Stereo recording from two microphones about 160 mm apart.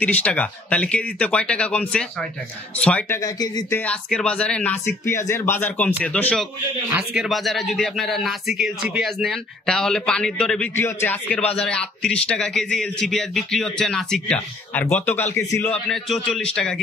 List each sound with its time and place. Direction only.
0.0 s speech: 10° left (ahead or behind)
3.2 s speech: 25° left (ahead or behind)
3.7 s speech: 10° left (ahead or behind)
6.9 s speech: 5° right (ahead or behind)